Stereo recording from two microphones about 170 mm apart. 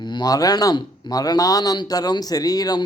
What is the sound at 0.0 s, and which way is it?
Speech, 25° left (ahead or behind).